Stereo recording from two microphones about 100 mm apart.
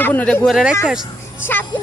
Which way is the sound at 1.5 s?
20° left (ahead or behind).